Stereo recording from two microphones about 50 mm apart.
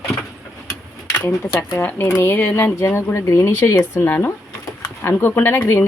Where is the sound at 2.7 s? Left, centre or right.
Left.